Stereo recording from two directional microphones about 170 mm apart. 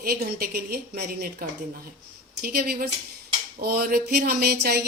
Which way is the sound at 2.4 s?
65° right (ahead or behind).